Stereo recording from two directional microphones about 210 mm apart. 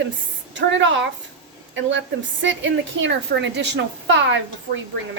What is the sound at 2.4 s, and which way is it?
A woman's voice, 60° right (ahead or behind).